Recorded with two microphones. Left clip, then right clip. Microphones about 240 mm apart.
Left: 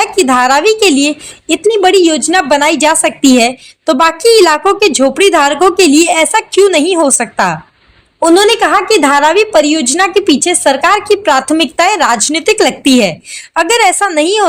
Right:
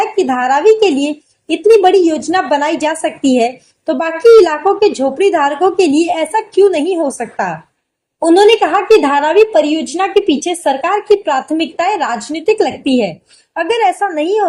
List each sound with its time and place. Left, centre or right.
0.0 s speech: left